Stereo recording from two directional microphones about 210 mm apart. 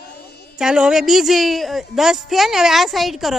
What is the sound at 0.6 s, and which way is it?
A woman's voice, 5° right (ahead or behind).